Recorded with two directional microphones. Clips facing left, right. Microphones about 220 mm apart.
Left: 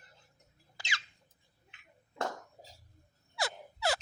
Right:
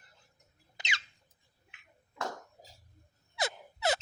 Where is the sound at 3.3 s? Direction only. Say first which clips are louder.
Right 2 dB; 20° right (ahead or behind).